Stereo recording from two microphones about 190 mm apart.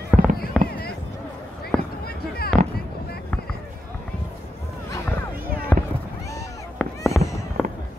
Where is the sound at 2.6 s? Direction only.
40° right (ahead or behind).